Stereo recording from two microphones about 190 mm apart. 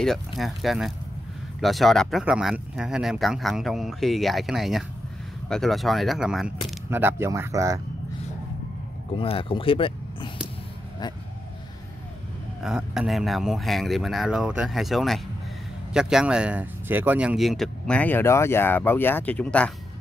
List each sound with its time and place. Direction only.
0.0 s speech: centre (ahead or behind); by 7.8 s 15° right (ahead or behind)
9.1 s speech: 30° left (ahead or behind)
12.6 s speech: 5° right (ahead or behind)